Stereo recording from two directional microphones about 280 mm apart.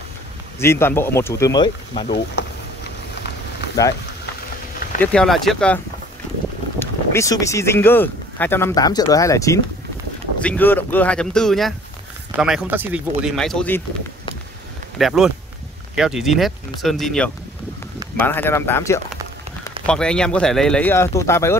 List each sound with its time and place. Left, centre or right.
0.6 s speech: centre
2.0 s speech: left
5.0 s speech: centre
6.8 s speech: centre
15.0 s speech: centre